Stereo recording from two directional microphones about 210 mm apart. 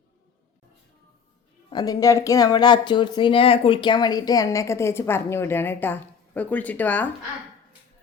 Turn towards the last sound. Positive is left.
turn(degrees=10)  # may be behind; listen again after turning